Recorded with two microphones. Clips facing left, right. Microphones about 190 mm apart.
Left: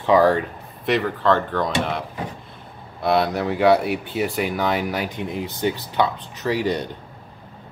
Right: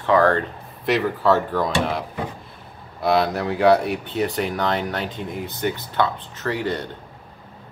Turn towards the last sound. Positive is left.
turn(degrees=15)  # may be behind; listen again after turning